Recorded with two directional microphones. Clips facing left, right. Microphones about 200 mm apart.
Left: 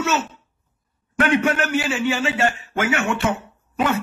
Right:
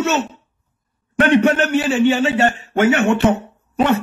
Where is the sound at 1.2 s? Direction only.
35° right (ahead or behind).